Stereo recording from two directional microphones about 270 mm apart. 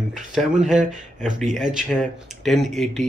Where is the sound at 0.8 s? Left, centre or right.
Right.